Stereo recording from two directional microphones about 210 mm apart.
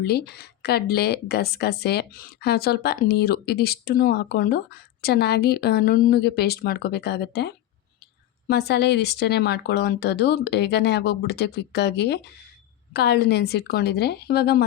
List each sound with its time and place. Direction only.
0.0 s a woman's voice: 50° left (ahead or behind)